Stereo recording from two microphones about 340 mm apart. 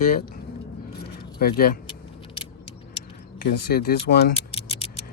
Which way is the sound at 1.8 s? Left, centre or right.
Centre.